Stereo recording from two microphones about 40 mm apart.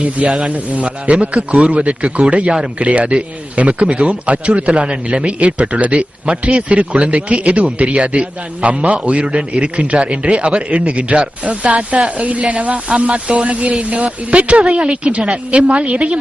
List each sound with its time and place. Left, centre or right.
0.4 s speech: right